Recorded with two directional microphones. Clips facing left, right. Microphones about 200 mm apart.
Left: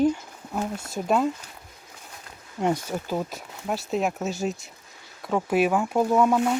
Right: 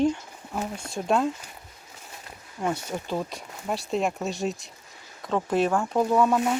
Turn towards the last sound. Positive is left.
turn(degrees=10)  # may be behind; listen again after turning